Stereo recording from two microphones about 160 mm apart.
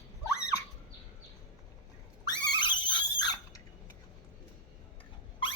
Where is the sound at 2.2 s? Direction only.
25° left (ahead or behind).